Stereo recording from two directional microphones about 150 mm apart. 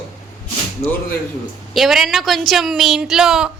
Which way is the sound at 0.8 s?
45° left (ahead or behind).